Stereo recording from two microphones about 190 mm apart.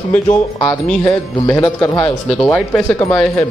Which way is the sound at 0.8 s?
5° left (ahead or behind).